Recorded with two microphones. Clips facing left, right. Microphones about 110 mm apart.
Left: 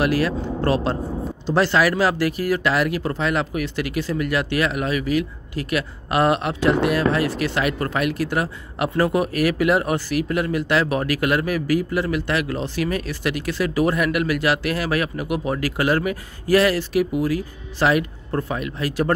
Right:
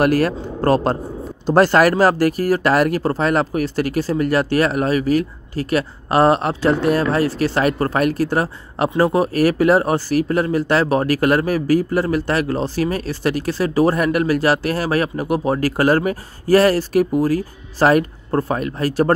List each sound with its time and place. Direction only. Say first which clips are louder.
0.0 s speech: right 4 dB; 45° right (ahead or behind)